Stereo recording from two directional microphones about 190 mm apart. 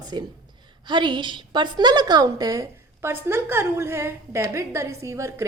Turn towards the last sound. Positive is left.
turn(degrees=-15)  # may be behind; listen again after turning